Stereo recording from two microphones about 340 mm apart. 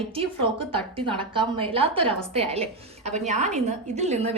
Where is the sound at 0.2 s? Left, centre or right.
Centre.